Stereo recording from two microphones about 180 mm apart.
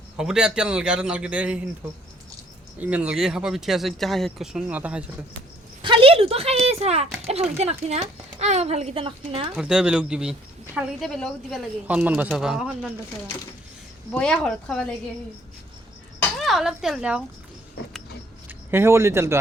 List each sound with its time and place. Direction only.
0.2 s speech: 5° right (ahead or behind)
2.7 s speech: 10° right (ahead or behind)
5.8 s a sound: 30° right (ahead or behind)
7.3 s speech: 35° right (ahead or behind)
9.6 s speech: 5° right (ahead or behind)
14.1 s speech: 5° left (ahead or behind)
16.4 s speech: centre (ahead or behind)
18.4 s speech: 15° right (ahead or behind)